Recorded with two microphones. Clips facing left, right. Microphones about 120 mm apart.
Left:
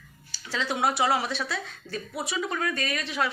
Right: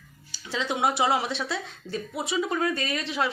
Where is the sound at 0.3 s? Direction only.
20° right (ahead or behind).